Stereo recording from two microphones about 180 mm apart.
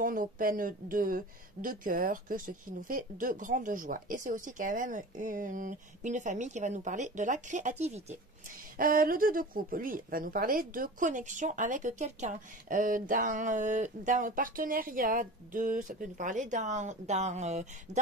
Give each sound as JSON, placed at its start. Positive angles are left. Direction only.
{"t": 0.0, "sound": "speech", "side_deg": -50}
{"t": 8.7, "sound": "speech", "side_deg": -50}